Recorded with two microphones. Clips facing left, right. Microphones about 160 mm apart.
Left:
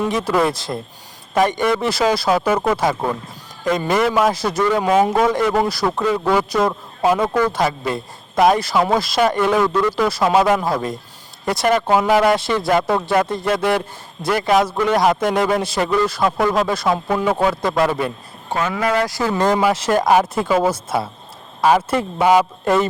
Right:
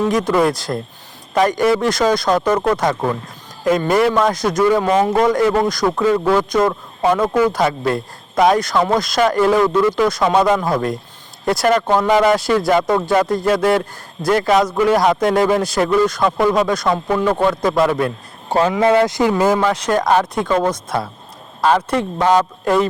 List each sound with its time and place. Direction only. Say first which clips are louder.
0.1 s a man's voice: right 3 dB; centre (ahead or behind)
9.9 s a man's voice: right 1 dB; 5° left (ahead or behind)
18.7 s speech: right 5 dB; 25° right (ahead or behind)
19.3 s speech: right 2 dB; 5° right (ahead or behind)
19.5 s a man's voice: even; 5° left (ahead or behind)